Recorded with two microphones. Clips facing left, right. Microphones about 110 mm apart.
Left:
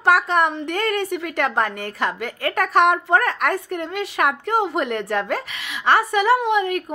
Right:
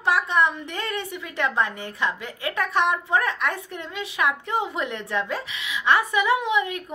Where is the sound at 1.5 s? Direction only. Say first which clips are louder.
Left 3 dB; 50° left (ahead or behind).